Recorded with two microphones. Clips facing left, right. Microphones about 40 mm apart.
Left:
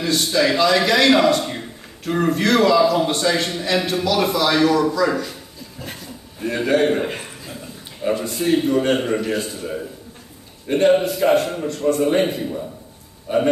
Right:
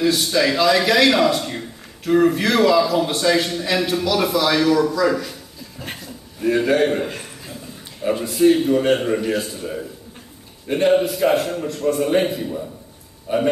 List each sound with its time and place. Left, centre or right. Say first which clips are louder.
0.0 s a man's voice: right 1 dB; centre
2.0 s a man's voice: right 2 dB; centre
8.1 s a man's voice: right 4 dB; centre